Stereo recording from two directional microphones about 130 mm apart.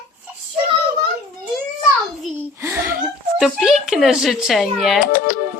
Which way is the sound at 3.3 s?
5° right (ahead or behind).